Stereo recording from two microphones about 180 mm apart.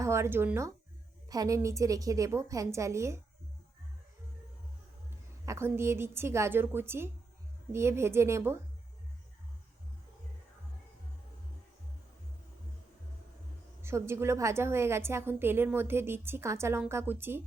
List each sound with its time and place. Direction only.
0.0 s a woman's voice: 15° right (ahead or behind)
5.5 s a woman's voice: 15° right (ahead or behind)
13.8 s a woman's voice: 15° right (ahead or behind)